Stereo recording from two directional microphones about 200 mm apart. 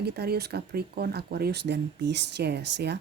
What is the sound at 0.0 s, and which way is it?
Speech, 55° right (ahead or behind).